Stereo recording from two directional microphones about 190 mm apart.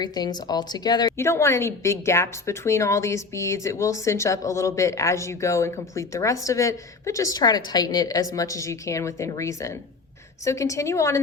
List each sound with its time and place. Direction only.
0.0 s a woman's voice: 20° left (ahead or behind)